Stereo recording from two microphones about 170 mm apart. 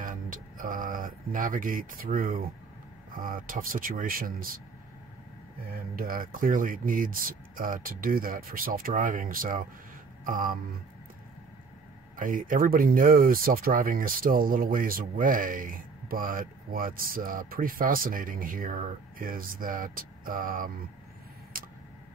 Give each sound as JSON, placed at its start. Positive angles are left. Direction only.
{"t": 0.0, "sound": "speech", "side_deg": -55}
{"t": 5.6, "sound": "speech", "side_deg": -60}
{"t": 12.2, "sound": "speech", "side_deg": -55}
{"t": 21.5, "sound": "tick", "side_deg": -55}